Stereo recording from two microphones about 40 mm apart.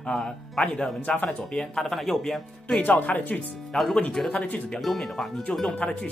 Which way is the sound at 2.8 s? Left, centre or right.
Left.